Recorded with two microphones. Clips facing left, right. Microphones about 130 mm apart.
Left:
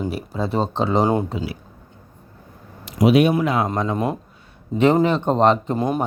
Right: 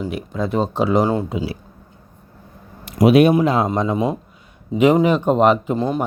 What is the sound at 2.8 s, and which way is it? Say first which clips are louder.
Speech: right 3 dB; 55° right (ahead or behind).